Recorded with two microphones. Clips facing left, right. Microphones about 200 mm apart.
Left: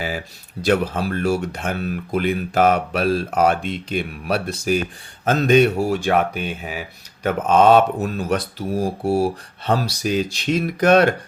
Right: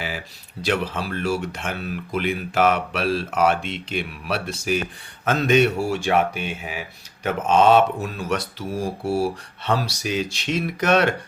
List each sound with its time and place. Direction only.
0.6 s speech: 45° left (ahead or behind)
9.0 s speech: 15° left (ahead or behind)
9.6 s speech: 40° left (ahead or behind)